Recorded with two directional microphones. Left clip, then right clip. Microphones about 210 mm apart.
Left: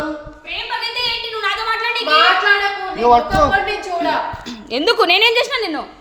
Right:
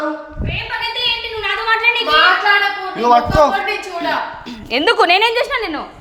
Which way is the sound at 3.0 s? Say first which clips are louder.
Right 1 dB; 40° right (ahead or behind).